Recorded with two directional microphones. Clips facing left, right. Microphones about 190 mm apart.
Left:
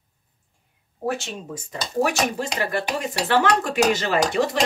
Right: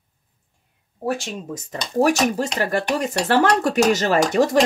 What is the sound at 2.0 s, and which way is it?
Speech, 40° right (ahead or behind).